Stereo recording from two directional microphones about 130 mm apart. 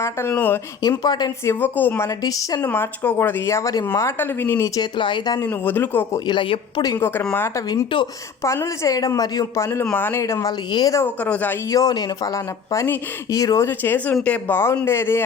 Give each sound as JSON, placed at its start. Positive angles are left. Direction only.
{"t": 0.0, "sound": "speech", "side_deg": 20}
{"t": 0.8, "sound": "speech", "side_deg": 30}
{"t": 1.5, "sound": "speech", "side_deg": 15}
{"t": 2.0, "sound": "speech", "side_deg": 30}
{"t": 2.6, "sound": "speech", "side_deg": 15}
{"t": 4.8, "sound": "speech", "side_deg": 40}
{"t": 5.5, "sound": "speech", "side_deg": 15}
{"t": 6.1, "sound": "speech", "side_deg": 35}
{"t": 6.9, "sound": "speech", "side_deg": 15}
{"t": 7.9, "sound": "speech", "side_deg": 40}
{"t": 8.4, "sound": "speech", "side_deg": 25}
{"t": 11.0, "sound": "speech", "side_deg": 10}
{"t": 11.7, "sound": "speech", "side_deg": 30}